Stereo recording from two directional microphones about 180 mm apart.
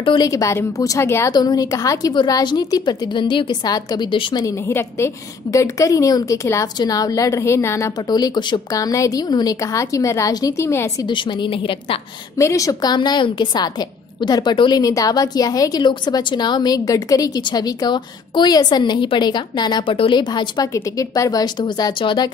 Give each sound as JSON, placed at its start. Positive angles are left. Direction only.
{"t": 0.0, "sound": "a woman's voice", "side_deg": 25}
{"t": 11.1, "sound": "a woman's voice", "side_deg": 25}
{"t": 12.4, "sound": "a woman's voice", "side_deg": 15}